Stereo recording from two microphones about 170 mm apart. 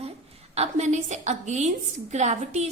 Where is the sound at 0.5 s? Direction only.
40° right (ahead or behind).